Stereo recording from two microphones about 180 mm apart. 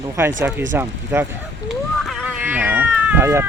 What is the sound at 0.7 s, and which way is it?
Speech, 10° right (ahead or behind).